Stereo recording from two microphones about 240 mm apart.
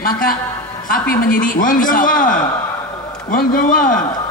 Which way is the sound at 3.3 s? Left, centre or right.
Left.